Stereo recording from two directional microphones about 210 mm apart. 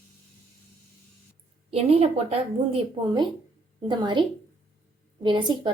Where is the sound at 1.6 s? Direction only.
30° right (ahead or behind).